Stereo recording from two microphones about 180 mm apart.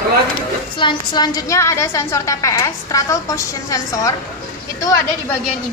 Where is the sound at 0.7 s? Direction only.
25° left (ahead or behind).